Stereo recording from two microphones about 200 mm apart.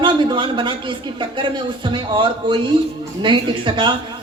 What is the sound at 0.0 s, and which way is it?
Speech, 25° right (ahead or behind).